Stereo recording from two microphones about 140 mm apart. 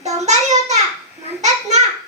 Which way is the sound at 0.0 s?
55° right (ahead or behind).